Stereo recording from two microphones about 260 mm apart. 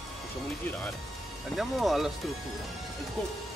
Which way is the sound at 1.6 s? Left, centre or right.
Centre.